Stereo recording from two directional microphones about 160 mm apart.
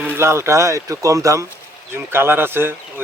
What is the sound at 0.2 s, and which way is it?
Speech, 15° right (ahead or behind).